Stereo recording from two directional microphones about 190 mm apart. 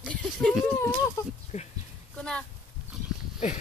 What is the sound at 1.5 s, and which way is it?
Speech, 35° left (ahead or behind).